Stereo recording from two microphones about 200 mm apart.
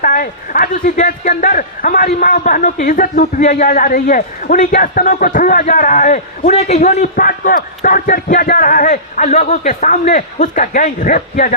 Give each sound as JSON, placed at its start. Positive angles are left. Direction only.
{"t": 0.0, "sound": "speech", "side_deg": 45}